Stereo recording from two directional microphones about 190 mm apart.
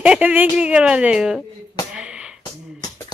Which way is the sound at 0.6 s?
5° right (ahead or behind).